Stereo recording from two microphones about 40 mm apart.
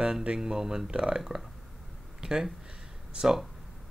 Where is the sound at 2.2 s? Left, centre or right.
Centre.